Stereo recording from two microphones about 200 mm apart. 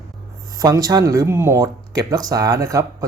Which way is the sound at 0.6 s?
20° right (ahead or behind).